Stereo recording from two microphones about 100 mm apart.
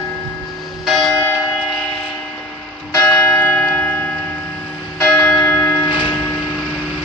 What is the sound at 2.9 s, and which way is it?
Church bell, 25° left (ahead or behind).